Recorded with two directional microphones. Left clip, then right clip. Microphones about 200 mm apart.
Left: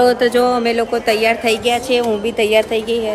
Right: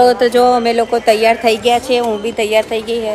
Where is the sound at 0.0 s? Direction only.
5° left (ahead or behind).